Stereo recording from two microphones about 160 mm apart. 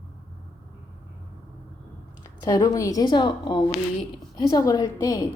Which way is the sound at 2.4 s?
25° left (ahead or behind).